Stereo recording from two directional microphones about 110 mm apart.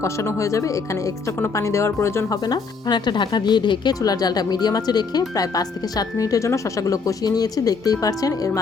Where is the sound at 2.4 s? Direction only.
40° left (ahead or behind).